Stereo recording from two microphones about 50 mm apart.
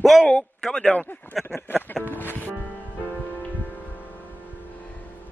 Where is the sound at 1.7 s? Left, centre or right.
Left.